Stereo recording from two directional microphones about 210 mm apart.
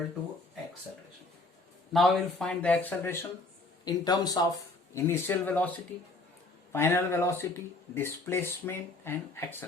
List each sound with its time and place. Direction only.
1.9 s a man's voice: centre (ahead or behind)